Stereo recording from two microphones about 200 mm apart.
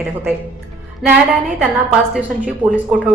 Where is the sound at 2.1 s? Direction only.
5° right (ahead or behind).